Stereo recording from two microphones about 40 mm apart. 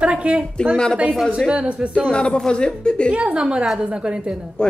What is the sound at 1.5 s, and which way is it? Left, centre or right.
Speech, right.